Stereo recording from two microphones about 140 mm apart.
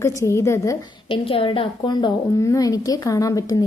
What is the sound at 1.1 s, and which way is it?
A woman's voice, 40° left (ahead or behind).